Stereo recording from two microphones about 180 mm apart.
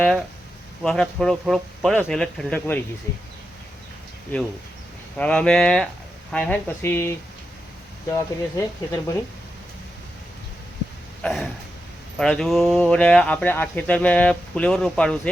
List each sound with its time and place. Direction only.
0.8 s speech: centre (ahead or behind)
5.1 s speech: 5° left (ahead or behind)
11.2 s speech: centre (ahead or behind)